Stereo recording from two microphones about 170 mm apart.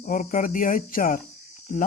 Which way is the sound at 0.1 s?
50° left (ahead or behind).